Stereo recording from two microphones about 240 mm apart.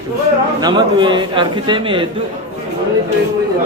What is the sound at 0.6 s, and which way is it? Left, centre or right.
A man's voice, centre.